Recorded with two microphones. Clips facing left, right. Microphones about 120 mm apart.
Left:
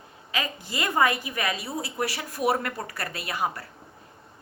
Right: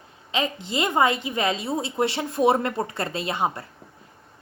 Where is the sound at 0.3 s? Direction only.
25° right (ahead or behind).